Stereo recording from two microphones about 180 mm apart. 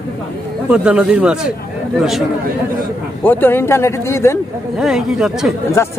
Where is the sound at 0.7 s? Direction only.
5° right (ahead or behind).